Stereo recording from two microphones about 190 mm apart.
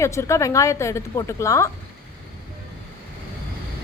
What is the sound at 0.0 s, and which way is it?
A woman's voice, 15° left (ahead or behind).